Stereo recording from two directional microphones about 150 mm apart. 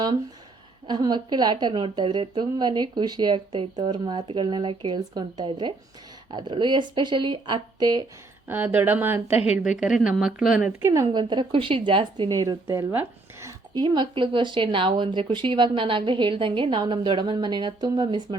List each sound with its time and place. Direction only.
0.9 s a woman's voice: 30° right (ahead or behind)
8.4 s speech: 15° right (ahead or behind)
9.2 s speech: 40° left (ahead or behind)
9.5 s speech: 5° right (ahead or behind)
10.8 s a woman's voice: 20° right (ahead or behind)
13.7 s speech: 30° right (ahead or behind)